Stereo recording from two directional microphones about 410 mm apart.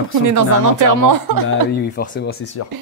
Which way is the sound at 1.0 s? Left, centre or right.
Right.